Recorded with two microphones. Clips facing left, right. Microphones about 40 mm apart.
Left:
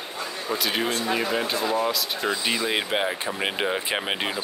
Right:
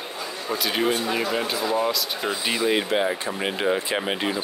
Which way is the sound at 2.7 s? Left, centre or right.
Centre.